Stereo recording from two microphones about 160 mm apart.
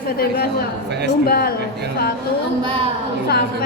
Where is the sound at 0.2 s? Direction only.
75° left (ahead or behind).